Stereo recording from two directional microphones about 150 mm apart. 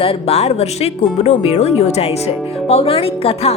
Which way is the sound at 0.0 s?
40° left (ahead or behind).